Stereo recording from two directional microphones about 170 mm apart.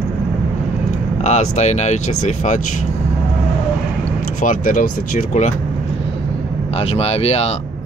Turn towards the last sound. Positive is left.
turn(degrees=35)  # may be behind; listen again after turning